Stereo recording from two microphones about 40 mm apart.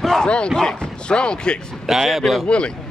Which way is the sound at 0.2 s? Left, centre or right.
Left.